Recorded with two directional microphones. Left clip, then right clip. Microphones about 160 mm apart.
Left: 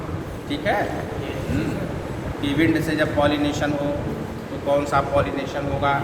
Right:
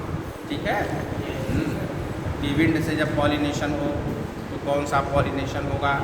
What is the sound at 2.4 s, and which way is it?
A man's voice, 20° left (ahead or behind).